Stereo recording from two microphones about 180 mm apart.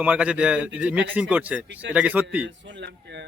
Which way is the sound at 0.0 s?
5° right (ahead or behind).